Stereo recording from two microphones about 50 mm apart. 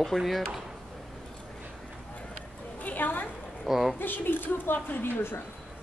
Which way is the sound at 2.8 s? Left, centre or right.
Left.